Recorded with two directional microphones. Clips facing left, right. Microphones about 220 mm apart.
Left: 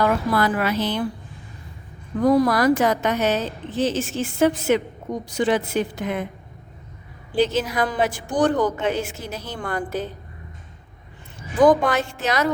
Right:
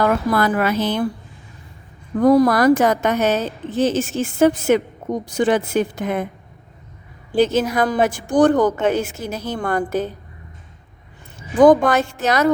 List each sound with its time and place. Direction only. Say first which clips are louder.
0.0 s a woman's voice: right 2 dB; 50° right (ahead or behind)
2.2 s a woman's voice: right 4 dB; 50° right (ahead or behind)
7.3 s a woman's voice: right 4 dB; 45° right (ahead or behind)
11.6 s a woman's voice: right 4 dB; 50° right (ahead or behind)